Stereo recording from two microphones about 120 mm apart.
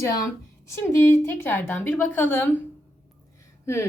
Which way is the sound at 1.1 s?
15° left (ahead or behind).